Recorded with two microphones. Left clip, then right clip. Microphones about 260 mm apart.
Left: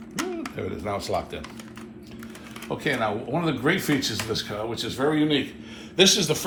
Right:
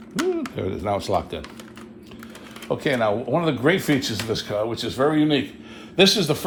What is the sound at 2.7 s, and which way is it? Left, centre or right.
A man's voice, right.